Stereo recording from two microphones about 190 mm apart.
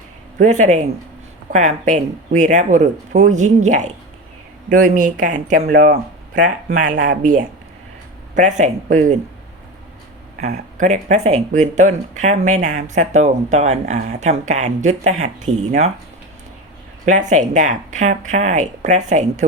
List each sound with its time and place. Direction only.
0.3 s speech: 40° right (ahead or behind)
10.3 s speech: 45° right (ahead or behind)
17.1 s speech: 40° right (ahead or behind)